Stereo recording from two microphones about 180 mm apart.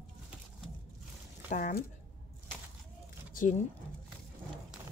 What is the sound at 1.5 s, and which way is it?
Speech, 45° left (ahead or behind).